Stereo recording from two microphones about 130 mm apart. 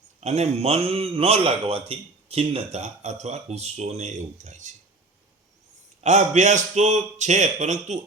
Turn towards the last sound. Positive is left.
turn(degrees=-65)  # may be behind; listen again after turning